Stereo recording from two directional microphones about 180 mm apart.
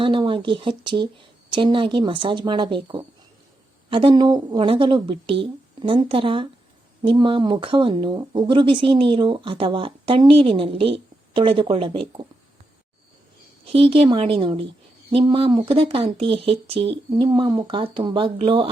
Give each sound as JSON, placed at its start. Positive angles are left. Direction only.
{"t": 0.0, "sound": "speech", "side_deg": -30}
{"t": 13.7, "sound": "a woman's voice", "side_deg": -30}